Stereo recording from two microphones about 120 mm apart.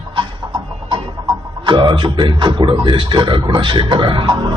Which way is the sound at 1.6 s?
40° right (ahead or behind).